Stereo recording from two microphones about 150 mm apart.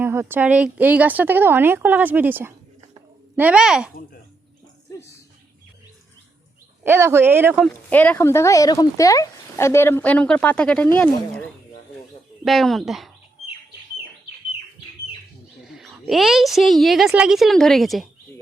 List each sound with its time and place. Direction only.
0.0 s a woman's voice: 15° right (ahead or behind)
6.8 s a woman's voice: 15° right (ahead or behind)
7.5 s speech: 5° left (ahead or behind)
12.5 s a woman's voice: centre (ahead or behind)
15.7 s a woman's voice: centre (ahead or behind)